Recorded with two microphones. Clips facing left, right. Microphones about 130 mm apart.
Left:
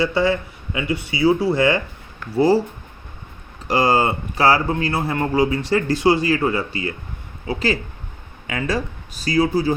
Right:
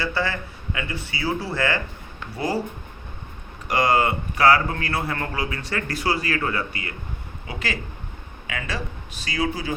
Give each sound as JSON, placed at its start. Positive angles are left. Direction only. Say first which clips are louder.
{"t": 0.0, "sound": "speech", "louder": "left 7 dB", "side_deg": 20}
{"t": 3.7, "sound": "speech", "louder": "left 3 dB", "side_deg": 30}